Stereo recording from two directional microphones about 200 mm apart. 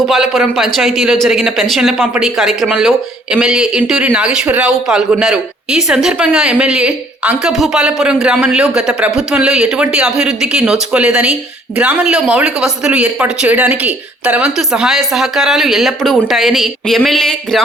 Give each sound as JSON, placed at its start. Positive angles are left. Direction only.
{"t": 0.0, "sound": "speech", "side_deg": 0}